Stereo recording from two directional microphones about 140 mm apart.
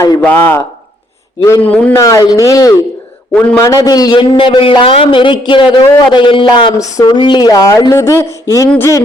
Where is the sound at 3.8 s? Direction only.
25° left (ahead or behind).